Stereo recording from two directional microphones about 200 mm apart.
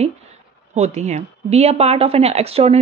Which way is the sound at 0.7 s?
35° right (ahead or behind).